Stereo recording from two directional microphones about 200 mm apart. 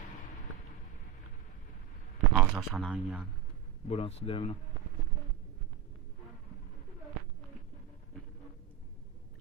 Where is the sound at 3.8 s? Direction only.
30° left (ahead or behind).